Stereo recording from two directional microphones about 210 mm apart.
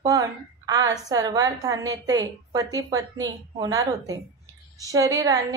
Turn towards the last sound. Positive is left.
turn(degrees=-15)  # may be behind; listen again after turning